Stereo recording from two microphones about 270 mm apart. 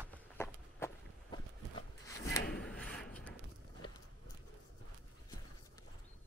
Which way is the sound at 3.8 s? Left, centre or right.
Centre.